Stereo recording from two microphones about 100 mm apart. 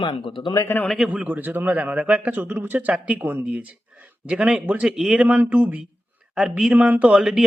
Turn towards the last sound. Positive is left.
turn(degrees=-10)  # may be behind; listen again after turning